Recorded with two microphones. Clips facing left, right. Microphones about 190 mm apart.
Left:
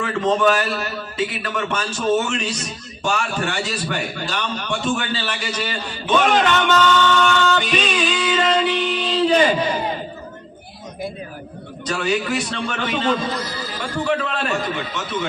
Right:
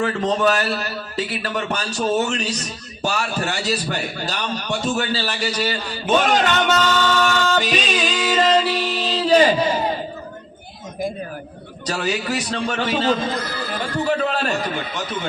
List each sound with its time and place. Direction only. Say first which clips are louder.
0.0 s a man's voice: left 1 dB; 40° right (ahead or behind)
11.9 s a man's voice: left 2 dB; 40° right (ahead or behind)
13.2 s chatter: right 1 dB; 55° right (ahead or behind)
14.1 s a man's voice: right 1 dB; 40° right (ahead or behind)